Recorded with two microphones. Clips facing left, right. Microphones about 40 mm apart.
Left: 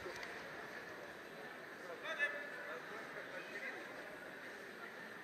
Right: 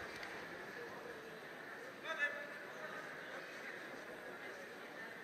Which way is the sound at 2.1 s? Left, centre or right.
Centre.